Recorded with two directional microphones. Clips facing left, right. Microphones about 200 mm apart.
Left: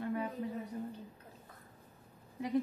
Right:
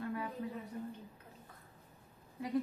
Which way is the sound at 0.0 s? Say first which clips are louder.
Left 3 dB; 25° left (ahead or behind).